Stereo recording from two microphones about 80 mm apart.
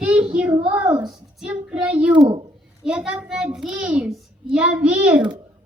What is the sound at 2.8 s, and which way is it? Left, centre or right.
A child's voice, centre.